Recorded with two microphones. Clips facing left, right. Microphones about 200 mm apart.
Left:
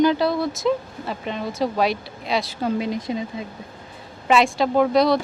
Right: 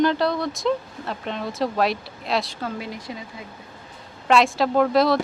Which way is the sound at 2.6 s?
20° left (ahead or behind).